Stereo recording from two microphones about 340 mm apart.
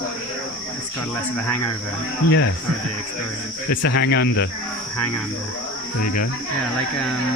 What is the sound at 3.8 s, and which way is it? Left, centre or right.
Speech, left.